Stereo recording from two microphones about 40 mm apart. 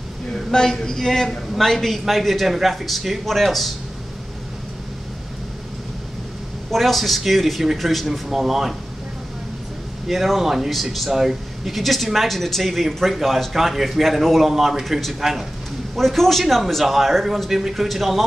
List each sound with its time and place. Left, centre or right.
0.3 s speech: centre
6.7 s speech: centre
10.0 s speech: centre
11.1 s speech: centre
16.1 s speech: centre